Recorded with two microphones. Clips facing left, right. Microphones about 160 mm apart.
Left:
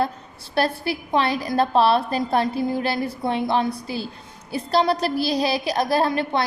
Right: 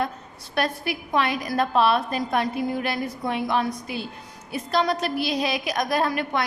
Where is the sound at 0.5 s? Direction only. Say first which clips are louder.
Left 3 dB; 30° left (ahead or behind).